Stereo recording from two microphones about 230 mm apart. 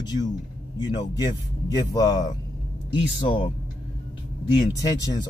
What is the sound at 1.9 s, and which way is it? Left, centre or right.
A man's voice, centre.